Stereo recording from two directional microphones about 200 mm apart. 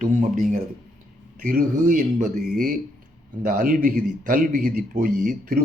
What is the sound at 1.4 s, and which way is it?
Speech, 45° right (ahead or behind).